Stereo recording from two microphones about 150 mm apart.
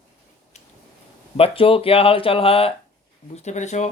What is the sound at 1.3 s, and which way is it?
Speech, 40° left (ahead or behind).